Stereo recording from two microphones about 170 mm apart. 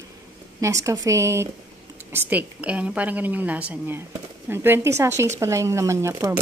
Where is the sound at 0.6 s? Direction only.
20° right (ahead or behind).